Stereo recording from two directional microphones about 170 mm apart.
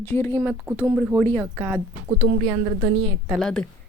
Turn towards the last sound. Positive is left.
turn(degrees=5)  # may be behind; listen again after turning